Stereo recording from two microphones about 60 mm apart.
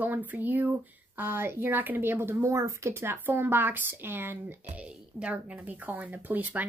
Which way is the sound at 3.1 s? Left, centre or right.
Right.